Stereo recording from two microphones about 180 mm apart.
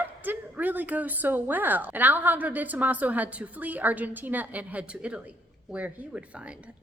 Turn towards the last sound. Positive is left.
turn(degrees=-5)  # may be behind; listen again after turning